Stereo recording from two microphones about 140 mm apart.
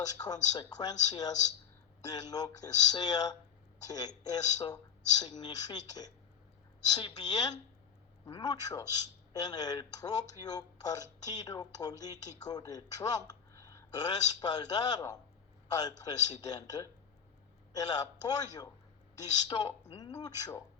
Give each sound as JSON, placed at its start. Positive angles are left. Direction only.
{"t": 0.2, "sound": "a woman's voice", "side_deg": 25}